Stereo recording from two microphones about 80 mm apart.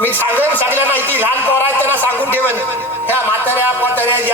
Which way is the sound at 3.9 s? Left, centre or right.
Right.